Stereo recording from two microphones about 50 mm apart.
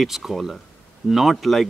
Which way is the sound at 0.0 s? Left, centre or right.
Centre.